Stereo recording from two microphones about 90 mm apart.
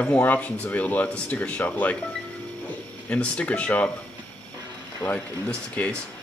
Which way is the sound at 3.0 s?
15° left (ahead or behind).